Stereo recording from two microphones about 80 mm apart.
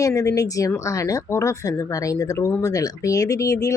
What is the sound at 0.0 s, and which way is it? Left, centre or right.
Speech, left.